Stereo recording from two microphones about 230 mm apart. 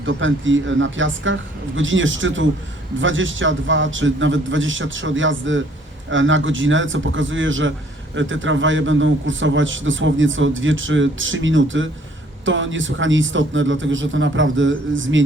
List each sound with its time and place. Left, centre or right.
0.0 s a man's voice: right